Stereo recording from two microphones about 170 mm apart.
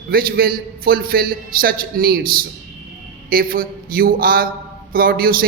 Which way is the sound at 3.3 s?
60° right (ahead or behind).